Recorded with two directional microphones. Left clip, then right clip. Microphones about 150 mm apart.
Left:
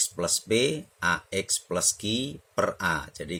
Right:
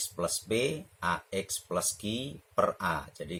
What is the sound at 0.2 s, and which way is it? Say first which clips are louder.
Speech: left 4 dB; 40° left (ahead or behind).